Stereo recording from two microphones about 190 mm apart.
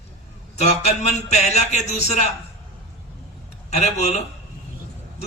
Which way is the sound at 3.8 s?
35° left (ahead or behind).